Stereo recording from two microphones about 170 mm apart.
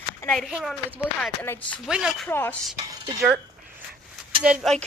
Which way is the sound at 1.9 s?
5° right (ahead or behind).